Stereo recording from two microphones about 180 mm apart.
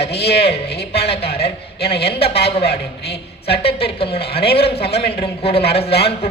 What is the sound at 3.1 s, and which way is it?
A woman's voice, 35° left (ahead or behind).